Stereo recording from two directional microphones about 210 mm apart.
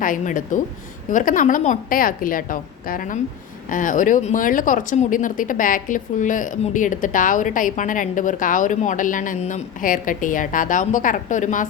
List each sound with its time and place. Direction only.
0.0 s speech: 40° left (ahead or behind)